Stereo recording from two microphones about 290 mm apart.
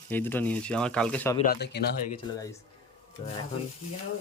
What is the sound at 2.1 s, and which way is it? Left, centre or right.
Speech, centre.